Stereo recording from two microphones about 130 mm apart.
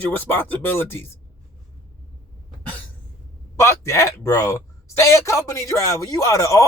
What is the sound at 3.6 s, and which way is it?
Speech, 20° left (ahead or behind).